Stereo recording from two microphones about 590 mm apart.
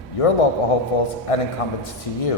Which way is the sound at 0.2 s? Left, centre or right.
Left.